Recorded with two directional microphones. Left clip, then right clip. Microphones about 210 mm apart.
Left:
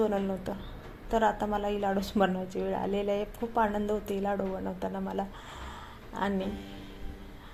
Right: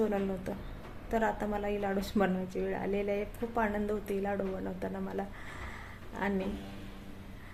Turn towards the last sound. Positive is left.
turn(degrees=10)  # may be behind; listen again after turning